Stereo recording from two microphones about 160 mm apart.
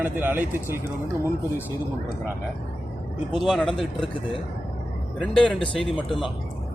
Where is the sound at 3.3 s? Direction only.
Centre (ahead or behind).